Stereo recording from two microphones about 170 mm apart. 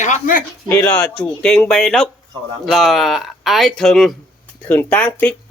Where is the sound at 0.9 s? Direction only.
5° left (ahead or behind).